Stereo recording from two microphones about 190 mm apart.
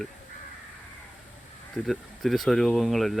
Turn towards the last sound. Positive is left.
turn(degrees=0)  # may be behind; listen again after turning